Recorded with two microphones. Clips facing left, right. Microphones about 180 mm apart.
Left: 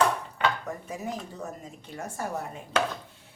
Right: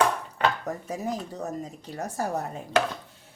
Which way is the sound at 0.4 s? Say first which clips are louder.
Right 2 dB; 40° right (ahead or behind).